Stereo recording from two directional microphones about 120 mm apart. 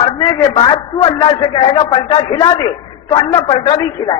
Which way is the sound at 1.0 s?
35° left (ahead or behind).